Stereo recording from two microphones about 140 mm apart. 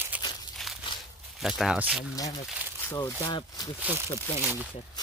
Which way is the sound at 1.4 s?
5° right (ahead or behind).